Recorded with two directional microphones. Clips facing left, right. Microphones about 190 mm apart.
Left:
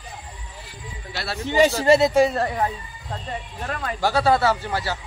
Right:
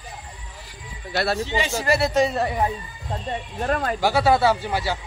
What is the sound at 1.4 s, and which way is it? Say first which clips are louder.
Speech: left 8 dB; 45° left (ahead or behind).